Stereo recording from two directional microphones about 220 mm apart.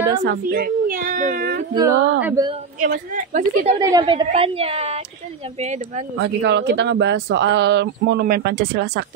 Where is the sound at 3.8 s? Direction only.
20° right (ahead or behind).